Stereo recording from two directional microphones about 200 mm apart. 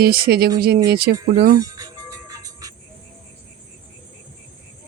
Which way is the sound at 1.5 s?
20° right (ahead or behind).